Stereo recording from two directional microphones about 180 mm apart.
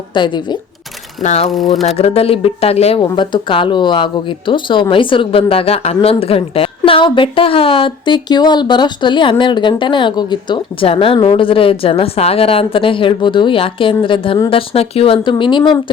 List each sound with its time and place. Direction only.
0.1 s a woman's voice: 25° left (ahead or behind)
1.2 s speech: 40° left (ahead or behind)
1.5 s speech: centre (ahead or behind)
2.0 s a woman's voice: 35° left (ahead or behind)